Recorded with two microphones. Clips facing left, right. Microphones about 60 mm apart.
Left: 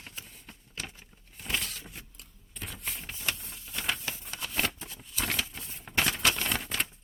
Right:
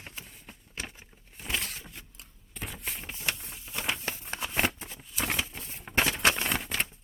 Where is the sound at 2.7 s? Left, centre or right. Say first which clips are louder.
Even; centre.